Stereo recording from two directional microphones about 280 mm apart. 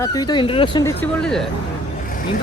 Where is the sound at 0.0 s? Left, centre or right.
Centre.